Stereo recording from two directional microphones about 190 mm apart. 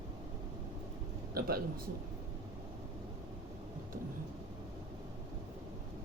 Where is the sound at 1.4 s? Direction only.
55° right (ahead or behind).